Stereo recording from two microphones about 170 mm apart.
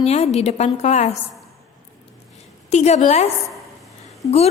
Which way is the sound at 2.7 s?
40° left (ahead or behind).